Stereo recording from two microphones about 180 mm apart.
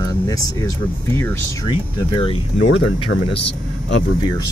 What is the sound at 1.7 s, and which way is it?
Speech, 25° left (ahead or behind).